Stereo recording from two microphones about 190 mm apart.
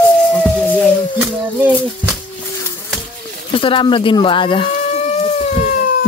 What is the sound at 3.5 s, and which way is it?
Speech, 25° left (ahead or behind).